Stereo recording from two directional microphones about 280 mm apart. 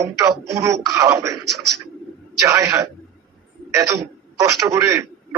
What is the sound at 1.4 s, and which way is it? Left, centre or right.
Speech, right.